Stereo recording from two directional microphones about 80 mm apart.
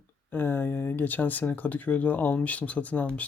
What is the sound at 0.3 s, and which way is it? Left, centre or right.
Speech, left.